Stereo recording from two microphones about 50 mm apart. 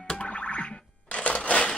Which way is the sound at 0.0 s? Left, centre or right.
Left.